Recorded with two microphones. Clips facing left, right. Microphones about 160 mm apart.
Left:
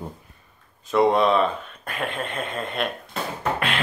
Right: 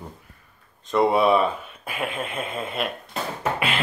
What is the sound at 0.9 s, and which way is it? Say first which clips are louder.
Speech: even; centre (ahead or behind).